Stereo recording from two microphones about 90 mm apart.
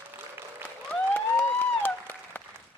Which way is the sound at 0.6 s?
20° left (ahead or behind).